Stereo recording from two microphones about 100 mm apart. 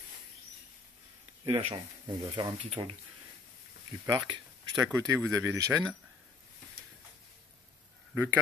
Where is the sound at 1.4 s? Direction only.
60° right (ahead or behind); by 2.9 s 40° right (ahead or behind).